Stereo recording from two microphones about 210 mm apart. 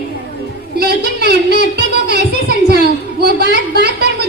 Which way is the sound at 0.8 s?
50° right (ahead or behind).